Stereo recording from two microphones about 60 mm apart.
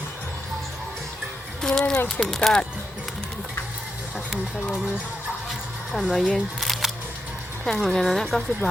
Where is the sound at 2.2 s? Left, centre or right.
Centre.